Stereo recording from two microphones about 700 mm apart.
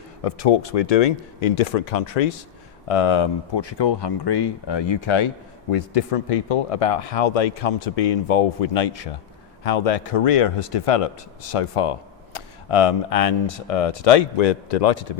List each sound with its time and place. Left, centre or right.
0.2 s speech: left
2.8 s speech: left